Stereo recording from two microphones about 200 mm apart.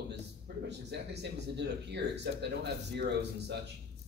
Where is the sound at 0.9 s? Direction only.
60° right (ahead or behind).